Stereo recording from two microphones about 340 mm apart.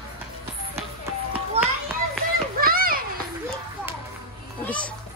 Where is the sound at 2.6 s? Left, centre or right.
Right.